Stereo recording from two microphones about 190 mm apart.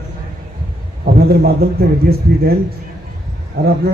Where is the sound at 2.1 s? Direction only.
55° right (ahead or behind).